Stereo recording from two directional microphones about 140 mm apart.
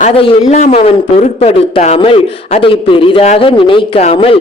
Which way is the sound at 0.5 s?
50° left (ahead or behind).